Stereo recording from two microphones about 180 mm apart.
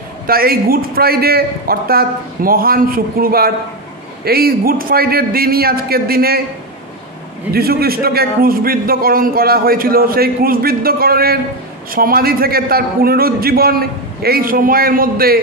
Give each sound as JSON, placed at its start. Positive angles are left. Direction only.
{"t": 0.3, "sound": "a man's voice", "side_deg": -55}
{"t": 7.5, "sound": "a man's voice", "side_deg": -60}